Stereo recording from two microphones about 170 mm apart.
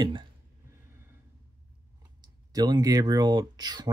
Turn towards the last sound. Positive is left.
turn(degrees=-25)  # may be behind; listen again after turning